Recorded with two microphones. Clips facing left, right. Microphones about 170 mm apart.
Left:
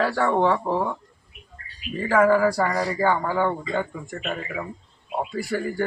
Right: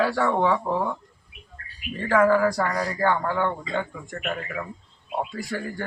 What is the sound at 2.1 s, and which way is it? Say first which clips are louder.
Speech: left 1 dB; 5° left (ahead or behind).